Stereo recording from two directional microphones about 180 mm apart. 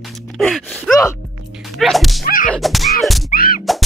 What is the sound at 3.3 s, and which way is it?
Music, 50° left (ahead or behind).